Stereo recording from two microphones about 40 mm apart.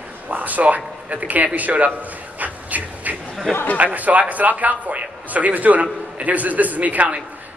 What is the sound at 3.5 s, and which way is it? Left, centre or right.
Speech, left.